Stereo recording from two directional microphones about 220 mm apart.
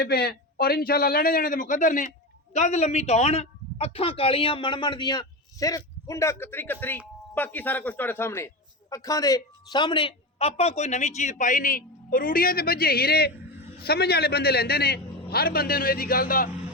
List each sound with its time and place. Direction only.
0.0 s a man's voice: 45° left (ahead or behind)